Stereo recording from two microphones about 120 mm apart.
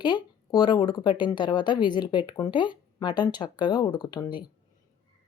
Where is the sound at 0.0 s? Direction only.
40° left (ahead or behind).